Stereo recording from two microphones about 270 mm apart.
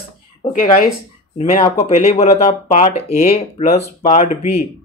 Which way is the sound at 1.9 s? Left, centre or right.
Left.